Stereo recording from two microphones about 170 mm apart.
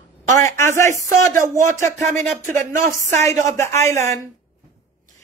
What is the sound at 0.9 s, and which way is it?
Speech, 15° left (ahead or behind).